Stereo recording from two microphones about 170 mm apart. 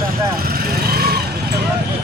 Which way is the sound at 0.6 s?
65° right (ahead or behind).